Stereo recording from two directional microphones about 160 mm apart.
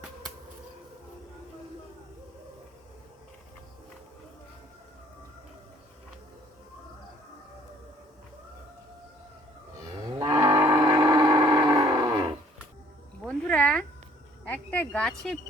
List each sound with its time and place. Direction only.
10.0 s livestock: 25° right (ahead or behind)
13.2 s a sound: 5° left (ahead or behind)
14.4 s speech: 10° left (ahead or behind)